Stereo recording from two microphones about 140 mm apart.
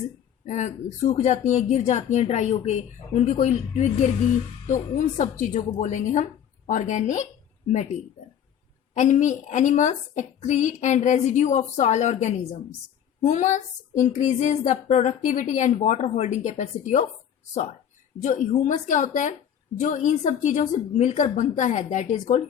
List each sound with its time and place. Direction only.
0.4 s speech: 55° left (ahead or behind)
9.0 s speech: 60° left (ahead or behind)
18.2 s speech: 60° left (ahead or behind)